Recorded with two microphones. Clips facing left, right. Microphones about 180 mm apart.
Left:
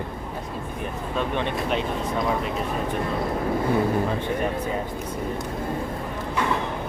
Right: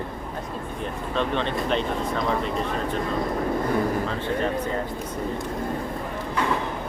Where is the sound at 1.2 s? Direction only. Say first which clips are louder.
Right 1 dB; 15° left (ahead or behind).